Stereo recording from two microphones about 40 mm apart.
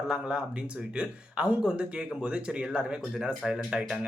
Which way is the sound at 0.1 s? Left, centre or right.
Centre.